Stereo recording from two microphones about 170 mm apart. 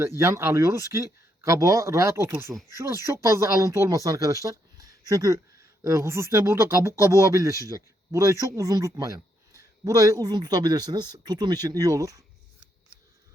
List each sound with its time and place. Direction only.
0.0 s speech: 15° right (ahead or behind)